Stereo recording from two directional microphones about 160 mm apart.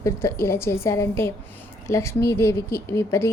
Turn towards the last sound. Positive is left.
turn(degrees=15)  # may be behind; listen again after turning